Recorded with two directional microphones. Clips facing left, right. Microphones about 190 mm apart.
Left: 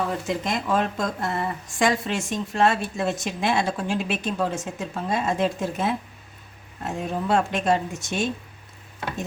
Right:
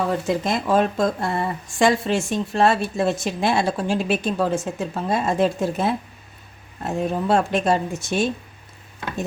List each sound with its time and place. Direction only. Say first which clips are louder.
0.1 s speech: right 4 dB; 35° right (ahead or behind)